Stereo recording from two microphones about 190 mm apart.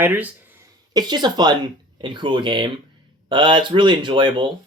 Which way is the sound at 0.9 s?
20° right (ahead or behind).